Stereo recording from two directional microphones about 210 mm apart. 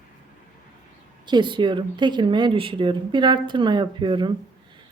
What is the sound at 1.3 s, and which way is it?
Speech, 20° right (ahead or behind).